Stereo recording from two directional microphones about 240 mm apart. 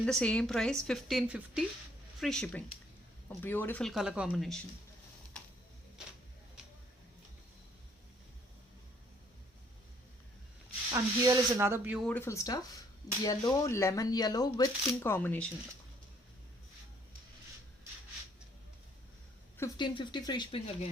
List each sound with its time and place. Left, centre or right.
0.0 s a woman's voice: centre
10.9 s speech: centre
12.0 s speech: centre
19.5 s speech: centre